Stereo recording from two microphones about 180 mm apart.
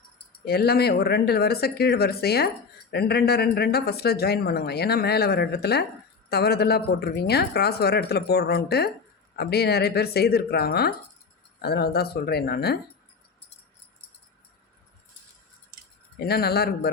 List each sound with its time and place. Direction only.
0.4 s speech: 60° left (ahead or behind)
16.2 s speech: 60° left (ahead or behind)